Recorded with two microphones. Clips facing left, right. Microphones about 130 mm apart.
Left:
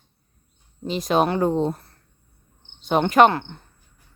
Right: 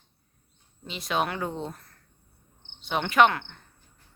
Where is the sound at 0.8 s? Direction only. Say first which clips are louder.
Left 8 dB; 40° left (ahead or behind).